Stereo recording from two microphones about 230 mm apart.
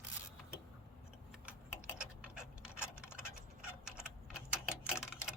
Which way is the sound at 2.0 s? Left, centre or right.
Centre.